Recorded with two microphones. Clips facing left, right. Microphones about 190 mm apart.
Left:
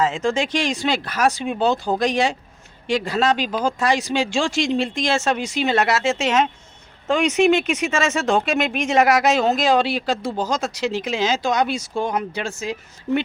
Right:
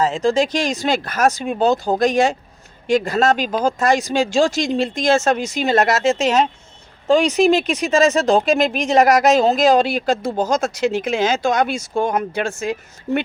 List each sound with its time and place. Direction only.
0.0 s speech: 35° right (ahead or behind); by 12.7 s 50° right (ahead or behind)